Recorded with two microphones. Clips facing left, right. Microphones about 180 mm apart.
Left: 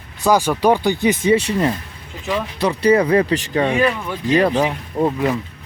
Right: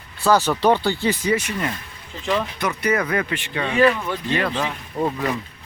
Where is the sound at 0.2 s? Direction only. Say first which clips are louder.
Left 2 dB; 15° left (ahead or behind); by 3.8 s 40° left (ahead or behind).